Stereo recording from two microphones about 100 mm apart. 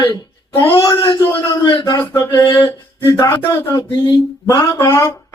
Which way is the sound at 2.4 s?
55° left (ahead or behind).